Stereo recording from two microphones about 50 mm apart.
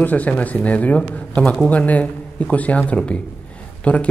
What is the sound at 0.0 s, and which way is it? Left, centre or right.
Speech, left.